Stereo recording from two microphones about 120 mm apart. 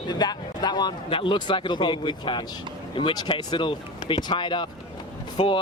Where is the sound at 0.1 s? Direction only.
35° left (ahead or behind).